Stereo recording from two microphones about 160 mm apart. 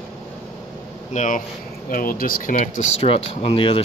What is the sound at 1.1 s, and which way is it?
Speech, 50° left (ahead or behind).